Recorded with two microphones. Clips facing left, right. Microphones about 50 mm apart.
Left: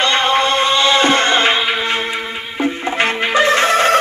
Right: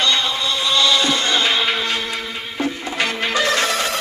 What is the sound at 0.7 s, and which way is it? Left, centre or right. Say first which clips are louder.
Music: left 3 dB; left.